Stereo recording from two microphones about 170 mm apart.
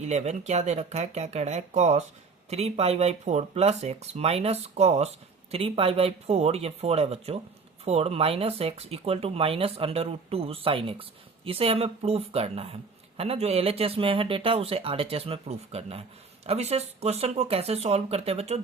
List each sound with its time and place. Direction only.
0.0 s speech: 40° right (ahead or behind)